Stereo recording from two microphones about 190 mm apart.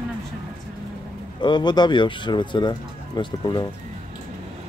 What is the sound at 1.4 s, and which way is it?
Speech, 25° left (ahead or behind).